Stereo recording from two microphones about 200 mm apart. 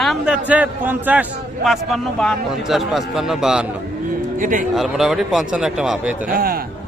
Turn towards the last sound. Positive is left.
turn(degrees=-45)  # may be behind; listen again after turning